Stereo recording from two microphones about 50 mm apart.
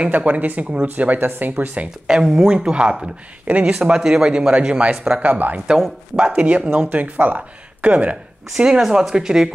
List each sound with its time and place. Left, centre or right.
0.1 s speech: right
2.0 s speech: centre
3.4 s speech: right
3.7 s speech: centre
4.9 s speech: centre
5.2 s speech: right
6.7 s speech: right
8.5 s speech: centre